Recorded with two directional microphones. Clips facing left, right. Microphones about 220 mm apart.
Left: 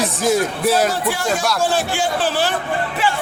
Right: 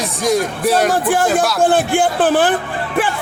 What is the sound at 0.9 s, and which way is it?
A man's voice, 50° right (ahead or behind).